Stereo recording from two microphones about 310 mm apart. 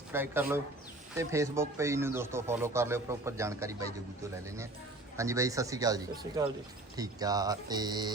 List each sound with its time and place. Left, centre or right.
0.1 s speech: centre